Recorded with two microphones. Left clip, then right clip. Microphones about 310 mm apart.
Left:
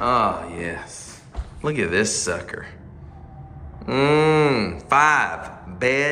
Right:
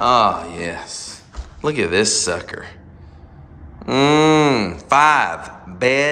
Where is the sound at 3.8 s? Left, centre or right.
Centre.